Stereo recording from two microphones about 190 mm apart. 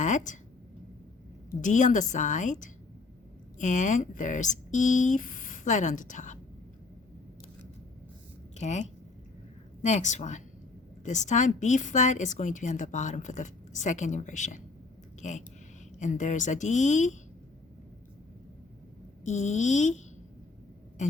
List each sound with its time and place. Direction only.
0.0 s a sound: 40° left (ahead or behind)
1.5 s a woman's voice: 40° left (ahead or behind)
8.5 s a woman's voice: 35° left (ahead or behind)
19.2 s a woman's voice: 40° left (ahead or behind)